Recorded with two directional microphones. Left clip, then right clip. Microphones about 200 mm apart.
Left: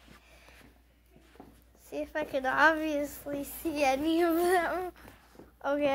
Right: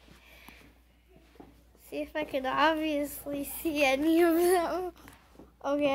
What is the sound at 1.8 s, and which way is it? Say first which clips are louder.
Child singing: even; 10° right (ahead or behind).